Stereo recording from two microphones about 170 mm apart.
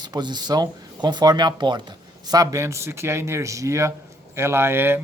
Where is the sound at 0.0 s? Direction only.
25° right (ahead or behind).